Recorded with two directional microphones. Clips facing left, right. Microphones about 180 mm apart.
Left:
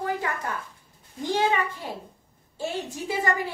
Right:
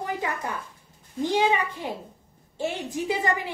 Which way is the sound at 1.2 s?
15° right (ahead or behind).